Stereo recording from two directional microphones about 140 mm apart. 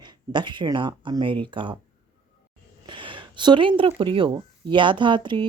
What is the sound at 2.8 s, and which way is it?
Speech, 35° right (ahead or behind).